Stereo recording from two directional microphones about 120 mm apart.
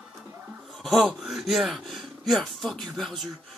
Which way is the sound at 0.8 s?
Centre (ahead or behind).